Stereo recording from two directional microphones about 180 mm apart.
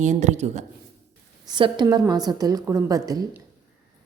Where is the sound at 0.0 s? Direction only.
40° right (ahead or behind).